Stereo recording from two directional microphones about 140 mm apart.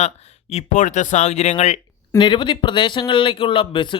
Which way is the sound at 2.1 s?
35° left (ahead or behind).